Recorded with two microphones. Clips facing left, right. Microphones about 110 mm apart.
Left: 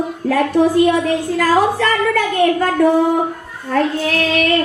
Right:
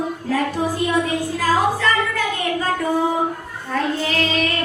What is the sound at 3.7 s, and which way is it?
Child singing, 65° left (ahead or behind).